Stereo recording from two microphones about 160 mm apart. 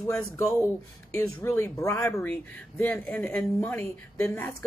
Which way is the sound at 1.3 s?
15° left (ahead or behind).